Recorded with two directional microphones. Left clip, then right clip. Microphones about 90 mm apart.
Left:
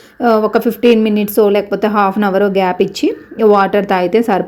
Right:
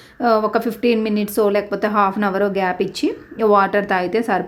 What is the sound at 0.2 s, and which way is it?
Speech, 20° left (ahead or behind).